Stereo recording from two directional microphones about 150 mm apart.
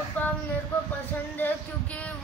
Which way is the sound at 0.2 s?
10° left (ahead or behind).